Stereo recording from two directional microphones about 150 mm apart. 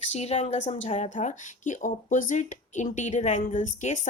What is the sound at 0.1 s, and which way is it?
Speech, 45° left (ahead or behind).